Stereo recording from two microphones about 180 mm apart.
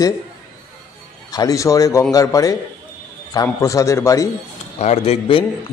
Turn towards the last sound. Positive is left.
turn(degrees=35)  # may be behind; listen again after turning